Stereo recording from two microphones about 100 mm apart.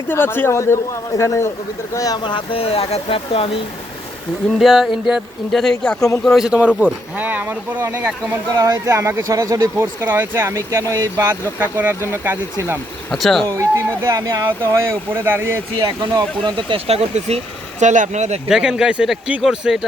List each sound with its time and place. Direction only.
0.1 s a man's voice: 25° left (ahead or behind)
2.2 s speech: 60° left (ahead or behind)
4.6 s speech: centre (ahead or behind); by 8.4 s 15° right (ahead or behind)
8.5 s speech: 40° right (ahead or behind)
11.6 s speech: 20° right (ahead or behind)
13.1 s speech: centre (ahead or behind)
13.5 s speech: 30° right (ahead or behind)
15.8 s speech: 40° right (ahead or behind)
16.4 s speech: 55° right (ahead or behind); by 17.4 s 90° right
18.4 s speech: 5° right (ahead or behind)